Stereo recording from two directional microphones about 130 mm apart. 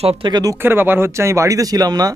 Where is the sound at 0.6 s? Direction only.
15° right (ahead or behind).